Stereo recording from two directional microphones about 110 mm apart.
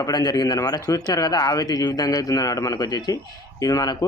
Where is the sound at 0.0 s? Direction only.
35° left (ahead or behind).